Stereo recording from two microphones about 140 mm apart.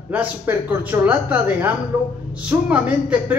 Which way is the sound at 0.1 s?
10° right (ahead or behind).